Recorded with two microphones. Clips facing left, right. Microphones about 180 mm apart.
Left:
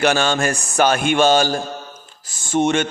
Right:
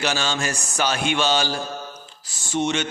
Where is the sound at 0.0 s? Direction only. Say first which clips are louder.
Left 7 dB; 55° left (ahead or behind).